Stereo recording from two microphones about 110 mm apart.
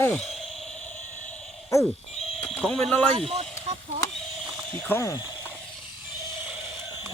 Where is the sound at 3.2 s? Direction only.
55° right (ahead or behind).